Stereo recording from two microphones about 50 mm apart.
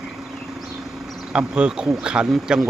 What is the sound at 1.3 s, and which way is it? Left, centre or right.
Speech, centre.